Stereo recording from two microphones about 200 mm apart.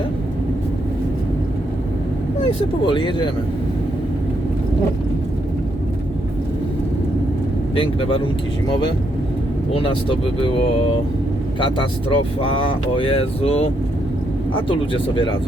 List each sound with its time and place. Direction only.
2.8 s speech: 25° left (ahead or behind)
7.8 s speech: 25° left (ahead or behind)
9.7 s speech: 25° left (ahead or behind)
11.6 s speech: 25° left (ahead or behind)
14.7 s speech: 25° left (ahead or behind)